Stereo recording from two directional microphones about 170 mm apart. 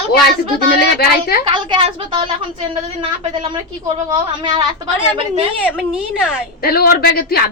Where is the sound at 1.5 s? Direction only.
25° right (ahead or behind).